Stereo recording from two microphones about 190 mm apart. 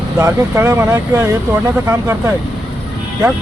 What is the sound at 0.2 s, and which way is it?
Speech, 15° right (ahead or behind).